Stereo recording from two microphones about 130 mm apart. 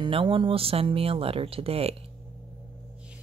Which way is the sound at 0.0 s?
40° right (ahead or behind).